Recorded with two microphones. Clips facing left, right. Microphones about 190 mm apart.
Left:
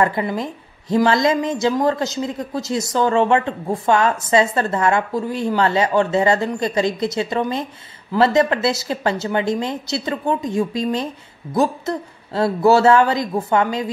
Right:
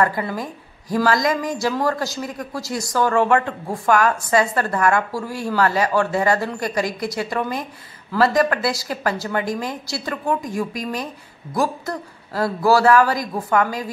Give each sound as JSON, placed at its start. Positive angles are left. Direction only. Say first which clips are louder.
{"t": 0.0, "sound": "a woman's voice", "louder": "left 2 dB", "side_deg": 20}